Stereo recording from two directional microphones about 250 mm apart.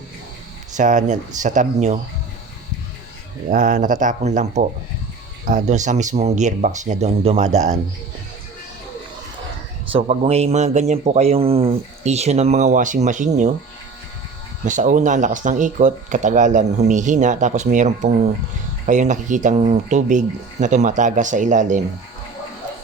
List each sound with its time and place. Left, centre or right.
0.7 s speech: right
3.5 s speech: right
9.9 s speech: right
14.6 s speech: right